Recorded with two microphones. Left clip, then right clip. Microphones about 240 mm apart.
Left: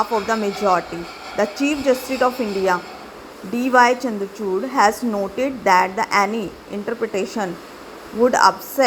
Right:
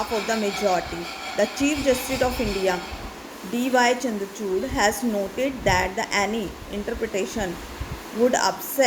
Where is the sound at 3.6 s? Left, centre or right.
Centre.